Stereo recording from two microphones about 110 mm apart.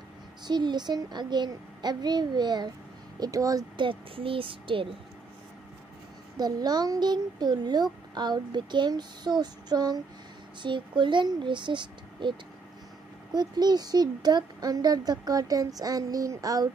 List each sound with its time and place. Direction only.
0.5 s a child's voice: 40° right (ahead or behind)
3.7 s speech: 50° right (ahead or behind)
6.3 s a child's voice: 35° right (ahead or behind)